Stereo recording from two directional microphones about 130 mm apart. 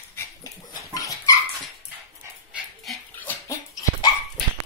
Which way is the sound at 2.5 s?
Centre (ahead or behind).